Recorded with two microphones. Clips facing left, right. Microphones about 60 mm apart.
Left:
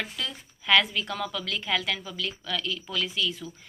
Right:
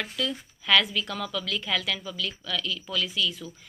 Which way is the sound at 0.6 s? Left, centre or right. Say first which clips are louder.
Left 1 dB; left.